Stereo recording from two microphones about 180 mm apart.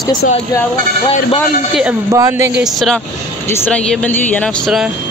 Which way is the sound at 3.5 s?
10° left (ahead or behind).